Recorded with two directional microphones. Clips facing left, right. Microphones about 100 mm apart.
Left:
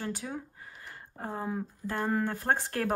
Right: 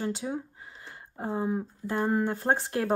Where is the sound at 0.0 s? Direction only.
20° right (ahead or behind).